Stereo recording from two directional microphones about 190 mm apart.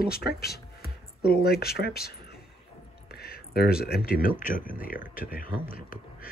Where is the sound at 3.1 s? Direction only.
50° left (ahead or behind).